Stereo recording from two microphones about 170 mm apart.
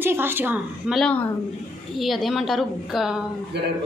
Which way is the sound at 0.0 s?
15° right (ahead or behind).